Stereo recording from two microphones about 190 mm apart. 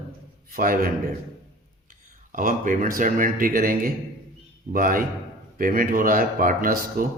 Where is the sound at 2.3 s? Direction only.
45° right (ahead or behind).